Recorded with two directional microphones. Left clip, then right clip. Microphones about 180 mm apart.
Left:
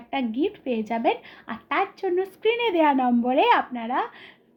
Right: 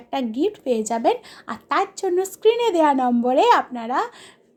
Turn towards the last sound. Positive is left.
turn(degrees=-25)  # may be behind; listen again after turning